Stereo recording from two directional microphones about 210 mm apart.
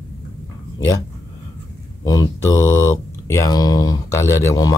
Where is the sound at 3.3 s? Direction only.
15° left (ahead or behind).